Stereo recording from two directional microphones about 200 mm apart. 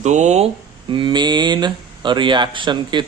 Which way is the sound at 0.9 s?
25° right (ahead or behind).